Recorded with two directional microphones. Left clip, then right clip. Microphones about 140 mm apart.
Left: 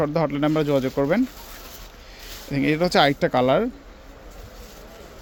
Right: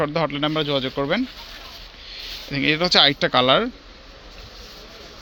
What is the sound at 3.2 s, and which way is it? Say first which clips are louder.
Speech: right 2 dB; 25° left (ahead or behind).